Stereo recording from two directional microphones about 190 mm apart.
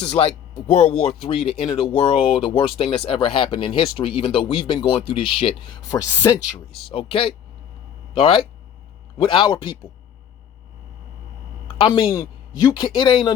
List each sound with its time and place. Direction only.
0.7 s speech: 35° left (ahead or behind); by 6.6 s 20° left (ahead or behind)
6.8 s speech: 30° left (ahead or behind)
11.8 s speech: 30° left (ahead or behind)
12.1 s speech: 20° left (ahead or behind)